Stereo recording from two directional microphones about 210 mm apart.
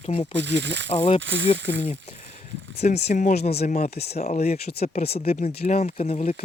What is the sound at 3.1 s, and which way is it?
Speech, 35° left (ahead or behind).